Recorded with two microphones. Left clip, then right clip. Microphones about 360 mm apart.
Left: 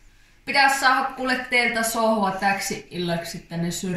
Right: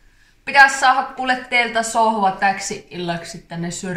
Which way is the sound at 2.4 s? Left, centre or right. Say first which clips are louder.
Right 4 dB; centre.